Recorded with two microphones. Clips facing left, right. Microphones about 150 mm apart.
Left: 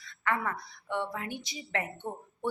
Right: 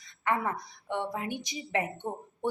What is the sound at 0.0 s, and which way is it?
A woman's voice, 20° right (ahead or behind).